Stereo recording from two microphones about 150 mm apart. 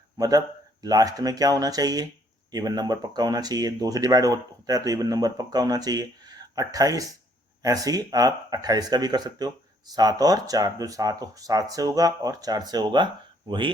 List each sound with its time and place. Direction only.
0.2 s speech: 25° right (ahead or behind)